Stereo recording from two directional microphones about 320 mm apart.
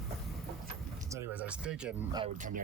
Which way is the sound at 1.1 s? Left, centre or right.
Centre.